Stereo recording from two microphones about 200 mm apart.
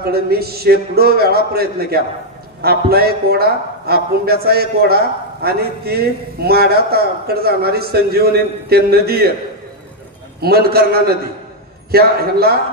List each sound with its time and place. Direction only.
0.0 s a man's voice: 50° right (ahead or behind)
10.4 s a man's voice: 50° right (ahead or behind)